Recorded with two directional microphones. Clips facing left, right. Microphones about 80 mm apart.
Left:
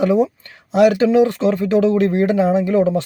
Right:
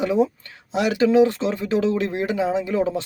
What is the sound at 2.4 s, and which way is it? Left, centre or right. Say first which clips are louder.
Speech: left 6 dB; left.